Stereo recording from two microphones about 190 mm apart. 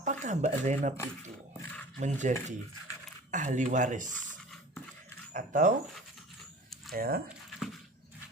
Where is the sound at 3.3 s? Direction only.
40° right (ahead or behind).